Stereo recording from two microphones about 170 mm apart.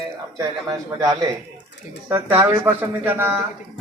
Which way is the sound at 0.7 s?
20° right (ahead or behind).